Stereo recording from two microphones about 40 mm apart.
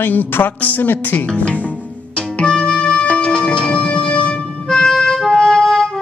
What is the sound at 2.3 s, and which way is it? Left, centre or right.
Music, left.